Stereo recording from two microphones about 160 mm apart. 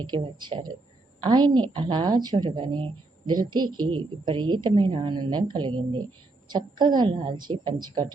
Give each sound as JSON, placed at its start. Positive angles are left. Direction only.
{"t": 0.1, "sound": "a woman's voice", "side_deg": -25}